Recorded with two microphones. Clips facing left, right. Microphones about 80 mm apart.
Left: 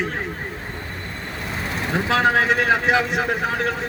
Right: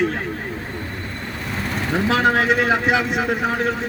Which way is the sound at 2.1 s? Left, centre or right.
Left.